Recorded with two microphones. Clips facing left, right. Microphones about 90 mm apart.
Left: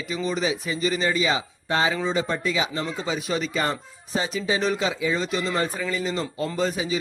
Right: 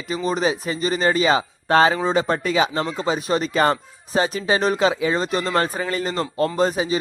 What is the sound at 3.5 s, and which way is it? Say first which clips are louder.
Speech: right 7 dB; 70° right (ahead or behind).